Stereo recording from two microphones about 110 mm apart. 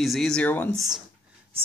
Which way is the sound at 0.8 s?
5° right (ahead or behind).